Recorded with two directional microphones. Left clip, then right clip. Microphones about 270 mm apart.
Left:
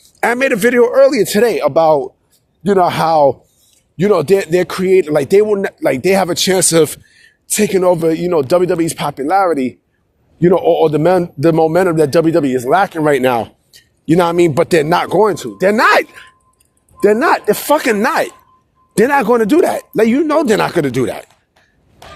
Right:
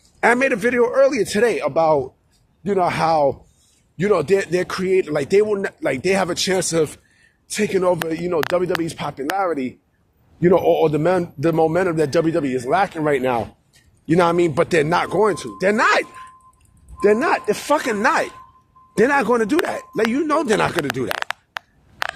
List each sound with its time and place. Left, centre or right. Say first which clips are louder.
0.2 s a man's voice: left 3 dB; left